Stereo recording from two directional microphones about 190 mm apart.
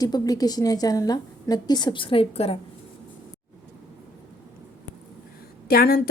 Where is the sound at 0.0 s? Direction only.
20° left (ahead or behind).